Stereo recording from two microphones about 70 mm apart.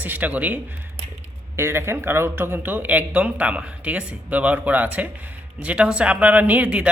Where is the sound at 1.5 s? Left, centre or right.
Right.